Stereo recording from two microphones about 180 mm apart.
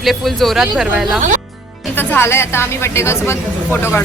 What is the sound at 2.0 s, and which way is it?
A woman's voice, 10° left (ahead or behind).